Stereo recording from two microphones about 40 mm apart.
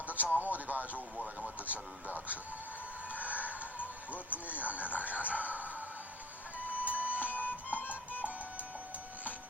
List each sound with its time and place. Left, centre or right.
0.1 s speech: right
0.9 s speech: left
1.7 s speech: right
4.3 s speech: left
4.6 s speech: right
6.7 s music: right
7.3 s music: left